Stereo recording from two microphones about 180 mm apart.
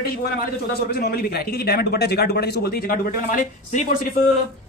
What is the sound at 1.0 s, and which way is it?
A man's voice, 60° left (ahead or behind).